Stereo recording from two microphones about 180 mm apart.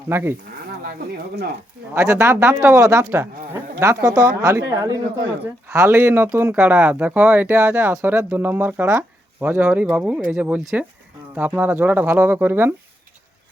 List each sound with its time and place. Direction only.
0.1 s speech: 10° right (ahead or behind)
1.9 s speech: 15° right (ahead or behind)